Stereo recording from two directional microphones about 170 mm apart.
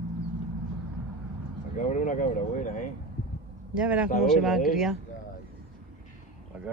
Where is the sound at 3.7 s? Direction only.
5° right (ahead or behind).